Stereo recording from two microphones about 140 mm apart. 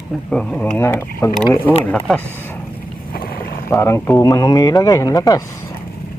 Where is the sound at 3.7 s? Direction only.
20° left (ahead or behind).